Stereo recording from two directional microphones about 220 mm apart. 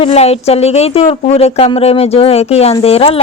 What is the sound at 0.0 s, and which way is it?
Speech, 25° left (ahead or behind).